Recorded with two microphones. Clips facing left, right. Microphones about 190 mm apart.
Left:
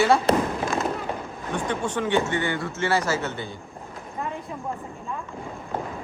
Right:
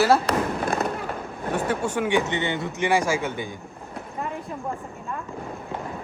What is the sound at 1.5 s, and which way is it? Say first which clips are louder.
Speech: right 2 dB; 5° right (ahead or behind).